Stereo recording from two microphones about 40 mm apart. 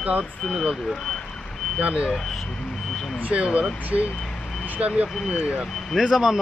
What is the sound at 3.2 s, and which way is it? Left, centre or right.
Speech, right.